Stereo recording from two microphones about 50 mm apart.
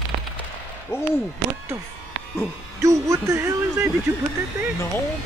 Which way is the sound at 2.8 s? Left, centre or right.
Right.